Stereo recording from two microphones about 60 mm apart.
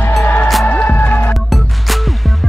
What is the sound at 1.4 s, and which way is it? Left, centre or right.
Music, centre.